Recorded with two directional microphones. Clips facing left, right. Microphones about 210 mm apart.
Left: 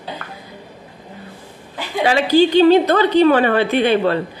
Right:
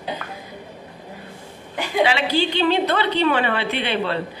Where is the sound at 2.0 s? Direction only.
40° left (ahead or behind).